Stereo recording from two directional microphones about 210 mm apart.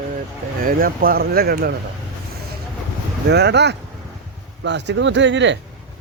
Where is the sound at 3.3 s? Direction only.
55° right (ahead or behind).